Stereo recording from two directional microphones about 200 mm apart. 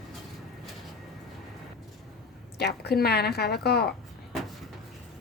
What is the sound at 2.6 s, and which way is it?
A woman's voice, 55° left (ahead or behind).